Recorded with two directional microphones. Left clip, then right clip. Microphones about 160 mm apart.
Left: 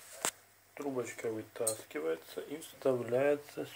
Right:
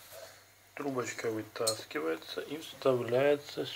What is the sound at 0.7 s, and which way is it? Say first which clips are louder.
Speech: right 3 dB; 15° left (ahead or behind).